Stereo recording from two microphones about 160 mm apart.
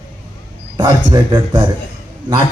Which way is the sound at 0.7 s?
25° right (ahead or behind).